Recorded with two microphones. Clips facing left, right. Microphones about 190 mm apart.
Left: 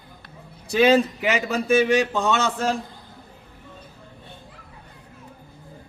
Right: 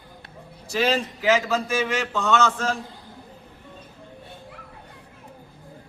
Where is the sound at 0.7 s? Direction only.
60° left (ahead or behind).